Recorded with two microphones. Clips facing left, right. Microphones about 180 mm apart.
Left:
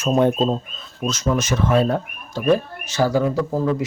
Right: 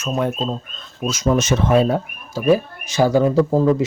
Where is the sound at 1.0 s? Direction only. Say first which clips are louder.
Right 3 dB; 10° right (ahead or behind).